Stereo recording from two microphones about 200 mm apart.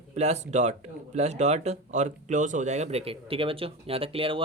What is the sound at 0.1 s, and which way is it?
Speech, 35° right (ahead or behind).